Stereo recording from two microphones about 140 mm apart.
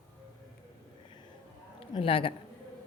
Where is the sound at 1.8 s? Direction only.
40° left (ahead or behind).